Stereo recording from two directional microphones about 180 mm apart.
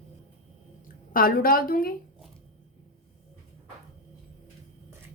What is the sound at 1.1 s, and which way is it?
Speech, 55° left (ahead or behind).